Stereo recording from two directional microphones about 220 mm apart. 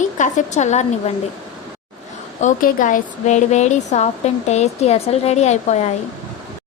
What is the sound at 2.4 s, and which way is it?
A woman's voice, 35° left (ahead or behind).